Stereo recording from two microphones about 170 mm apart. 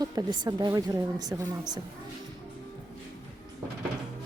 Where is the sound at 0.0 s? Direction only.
20° right (ahead or behind).